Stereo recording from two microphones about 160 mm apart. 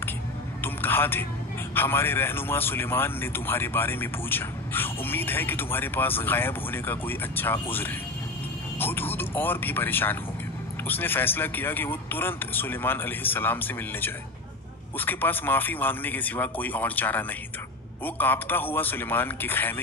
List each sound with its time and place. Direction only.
0.6 s a sound: 15° left (ahead or behind)
1.8 s speech: 15° left (ahead or behind)
8.7 s speech: 15° left (ahead or behind)